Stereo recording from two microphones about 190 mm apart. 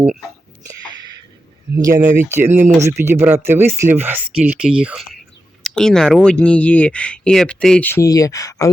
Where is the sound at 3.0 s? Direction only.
10° right (ahead or behind).